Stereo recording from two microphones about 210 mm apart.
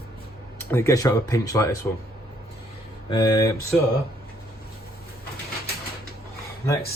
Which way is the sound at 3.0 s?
20° left (ahead or behind).